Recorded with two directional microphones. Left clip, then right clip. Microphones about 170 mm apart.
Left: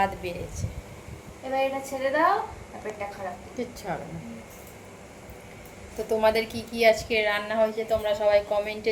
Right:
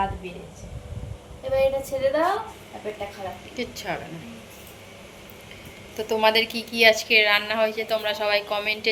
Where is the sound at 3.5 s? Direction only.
15° left (ahead or behind).